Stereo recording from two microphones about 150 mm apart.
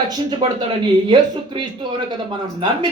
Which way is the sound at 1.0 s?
30° right (ahead or behind).